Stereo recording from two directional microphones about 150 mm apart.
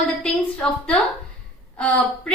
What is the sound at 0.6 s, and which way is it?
Speech, 5° left (ahead or behind).